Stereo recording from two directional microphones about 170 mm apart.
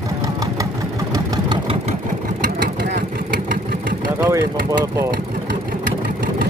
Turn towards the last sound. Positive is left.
turn(degrees=-15)  # may be behind; listen again after turning